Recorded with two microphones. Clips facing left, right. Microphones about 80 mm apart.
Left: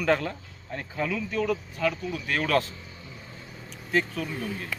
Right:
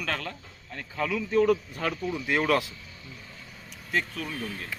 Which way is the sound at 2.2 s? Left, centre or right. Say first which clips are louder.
Even; centre.